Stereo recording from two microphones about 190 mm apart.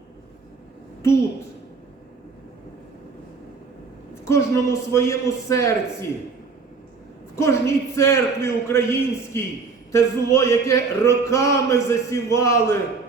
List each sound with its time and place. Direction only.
4.3 s speech: 15° left (ahead or behind)
7.3 s speech: 15° left (ahead or behind)